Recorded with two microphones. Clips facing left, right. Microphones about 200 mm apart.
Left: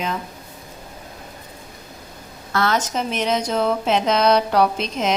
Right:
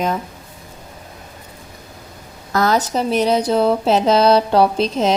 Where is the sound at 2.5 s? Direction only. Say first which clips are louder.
Right 4 dB; 40° right (ahead or behind).